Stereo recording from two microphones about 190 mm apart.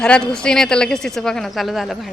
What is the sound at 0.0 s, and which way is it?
Speech, 5° left (ahead or behind).